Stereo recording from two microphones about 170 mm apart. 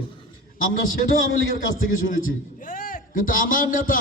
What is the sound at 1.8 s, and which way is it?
A man's voice, 50° left (ahead or behind).